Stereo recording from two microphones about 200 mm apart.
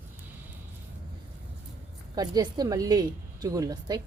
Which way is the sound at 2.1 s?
20° right (ahead or behind).